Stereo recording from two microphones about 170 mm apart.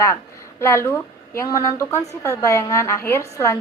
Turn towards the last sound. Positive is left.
turn(degrees=15)  # may be behind; listen again after turning